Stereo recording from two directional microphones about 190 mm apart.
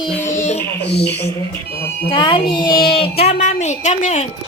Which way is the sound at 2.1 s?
25° left (ahead or behind).